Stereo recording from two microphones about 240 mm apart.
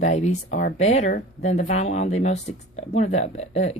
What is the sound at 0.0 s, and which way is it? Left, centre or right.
Speech, left.